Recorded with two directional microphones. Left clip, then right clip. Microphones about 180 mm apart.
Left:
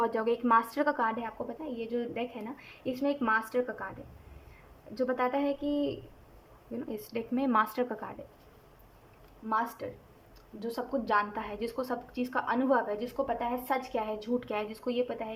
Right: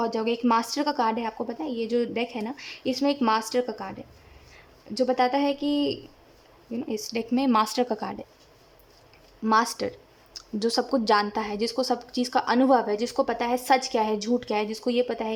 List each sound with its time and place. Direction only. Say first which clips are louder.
0.0 s a woman's voice: right 3 dB; 10° right (ahead or behind)
4.9 s a woman's voice: right 7 dB; 20° right (ahead or behind)
9.5 s a woman's voice: right 9 dB; 40° right (ahead or behind)